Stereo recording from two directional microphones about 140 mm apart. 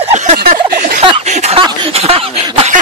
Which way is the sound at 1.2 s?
50° right (ahead or behind).